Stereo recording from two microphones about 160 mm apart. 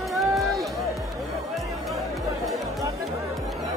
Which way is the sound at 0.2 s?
Centre (ahead or behind).